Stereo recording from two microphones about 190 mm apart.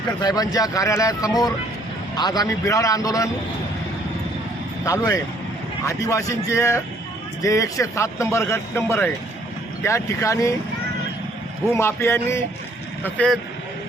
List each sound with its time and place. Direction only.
0.2 s speech: 20° left (ahead or behind)
4.9 s speech: 20° left (ahead or behind)
11.7 s speech: 15° left (ahead or behind)